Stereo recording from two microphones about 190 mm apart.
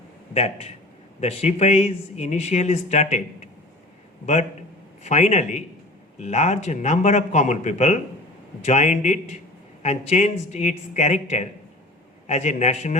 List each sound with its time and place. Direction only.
0.3 s speech: 35° left (ahead or behind)
5.0 s speech: 35° left (ahead or behind)